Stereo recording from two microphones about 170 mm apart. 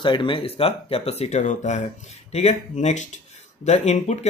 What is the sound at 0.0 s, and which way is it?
Speech, 30° left (ahead or behind).